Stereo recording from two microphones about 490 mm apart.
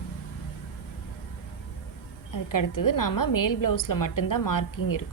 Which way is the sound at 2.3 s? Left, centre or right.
Left.